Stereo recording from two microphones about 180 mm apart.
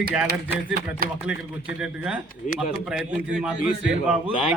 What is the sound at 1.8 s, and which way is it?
A man's voice, 5° right (ahead or behind).